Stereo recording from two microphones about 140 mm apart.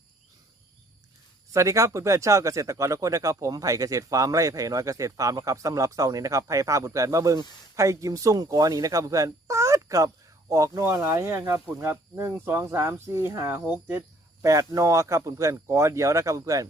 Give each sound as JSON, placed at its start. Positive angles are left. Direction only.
{"t": 1.5, "sound": "speech", "side_deg": -20}